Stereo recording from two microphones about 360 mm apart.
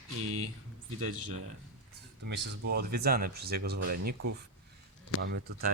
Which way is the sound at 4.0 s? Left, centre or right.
Right.